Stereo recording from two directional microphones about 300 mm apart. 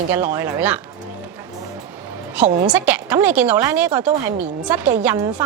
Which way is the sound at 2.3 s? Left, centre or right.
Centre.